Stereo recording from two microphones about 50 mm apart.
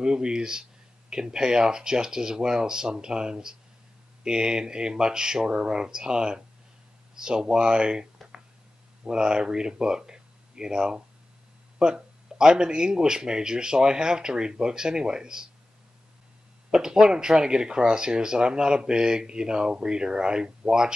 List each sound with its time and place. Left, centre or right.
0.0 s speech: centre
16.7 s speech: centre